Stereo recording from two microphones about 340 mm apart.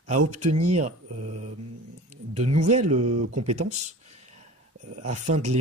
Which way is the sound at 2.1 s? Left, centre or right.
Right.